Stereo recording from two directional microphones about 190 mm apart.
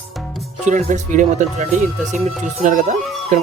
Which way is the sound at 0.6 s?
40° right (ahead or behind).